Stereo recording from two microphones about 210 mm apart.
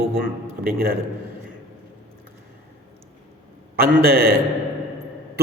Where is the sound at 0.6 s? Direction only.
45° right (ahead or behind).